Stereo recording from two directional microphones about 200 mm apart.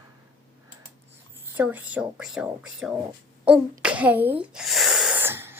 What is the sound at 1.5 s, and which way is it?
A woman's voice, 5° right (ahead or behind).